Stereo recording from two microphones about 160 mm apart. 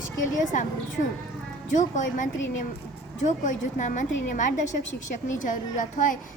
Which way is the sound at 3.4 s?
50° left (ahead or behind).